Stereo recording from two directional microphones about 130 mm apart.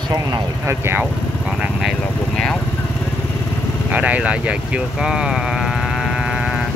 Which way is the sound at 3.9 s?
10° right (ahead or behind).